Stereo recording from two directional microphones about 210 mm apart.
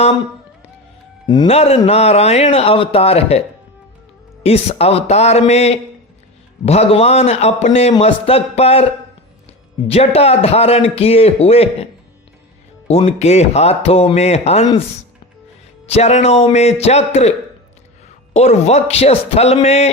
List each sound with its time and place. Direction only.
1.3 s a man's voice: 25° left (ahead or behind)
4.4 s a man's voice: 30° left (ahead or behind)
12.9 s a man's voice: 30° left (ahead or behind)
15.9 s speech: 30° left (ahead or behind)
18.3 s speech: 30° left (ahead or behind)